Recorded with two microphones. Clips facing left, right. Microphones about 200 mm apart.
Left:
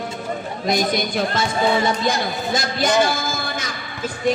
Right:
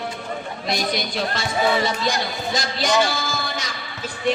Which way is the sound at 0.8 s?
50° left (ahead or behind).